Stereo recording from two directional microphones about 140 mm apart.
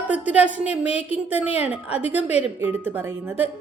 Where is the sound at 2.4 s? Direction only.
15° right (ahead or behind).